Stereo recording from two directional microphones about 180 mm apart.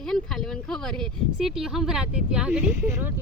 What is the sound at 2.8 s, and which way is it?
Speech, 15° right (ahead or behind).